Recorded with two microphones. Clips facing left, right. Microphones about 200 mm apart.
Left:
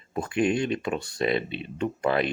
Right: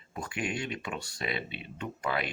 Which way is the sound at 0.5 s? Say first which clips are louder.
Left 9 dB; 40° left (ahead or behind).